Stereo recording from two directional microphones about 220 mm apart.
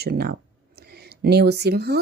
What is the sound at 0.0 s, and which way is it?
Speech, 45° right (ahead or behind).